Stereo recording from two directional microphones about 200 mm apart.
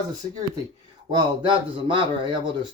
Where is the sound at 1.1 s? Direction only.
25° right (ahead or behind).